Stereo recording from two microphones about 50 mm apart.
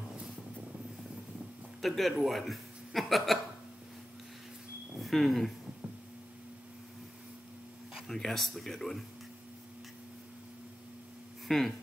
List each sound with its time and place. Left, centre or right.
1.8 s speech: centre
4.9 s speech: centre
8.1 s speech: centre
11.4 s speech: centre